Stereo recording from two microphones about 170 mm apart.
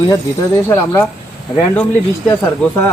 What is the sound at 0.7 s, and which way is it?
Speech, 15° left (ahead or behind).